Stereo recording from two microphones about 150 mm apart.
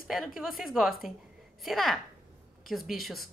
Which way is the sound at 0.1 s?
Centre (ahead or behind).